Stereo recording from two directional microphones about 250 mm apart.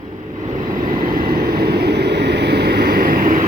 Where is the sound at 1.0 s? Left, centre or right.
Right.